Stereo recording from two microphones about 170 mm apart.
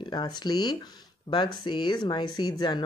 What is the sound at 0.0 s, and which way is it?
Speech, 25° left (ahead or behind).